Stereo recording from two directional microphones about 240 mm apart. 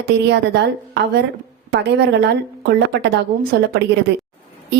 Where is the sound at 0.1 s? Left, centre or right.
Right.